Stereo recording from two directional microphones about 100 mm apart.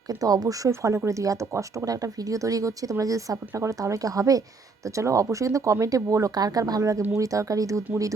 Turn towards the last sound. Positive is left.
turn(degrees=-35)  # may be behind; listen again after turning